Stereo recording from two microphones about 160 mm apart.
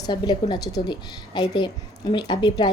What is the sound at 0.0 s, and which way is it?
A woman's voice, 25° left (ahead or behind).